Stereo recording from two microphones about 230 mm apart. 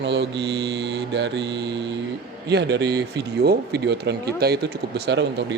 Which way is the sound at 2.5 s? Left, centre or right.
Right.